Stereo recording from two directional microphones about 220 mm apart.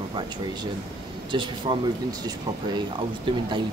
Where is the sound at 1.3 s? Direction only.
20° right (ahead or behind).